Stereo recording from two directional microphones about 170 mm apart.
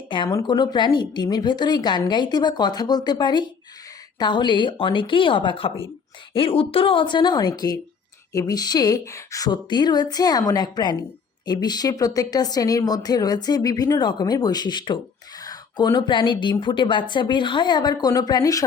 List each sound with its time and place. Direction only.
0.1 s speech: 25° left (ahead or behind)